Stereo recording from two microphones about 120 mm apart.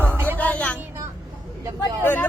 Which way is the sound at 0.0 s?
15° right (ahead or behind).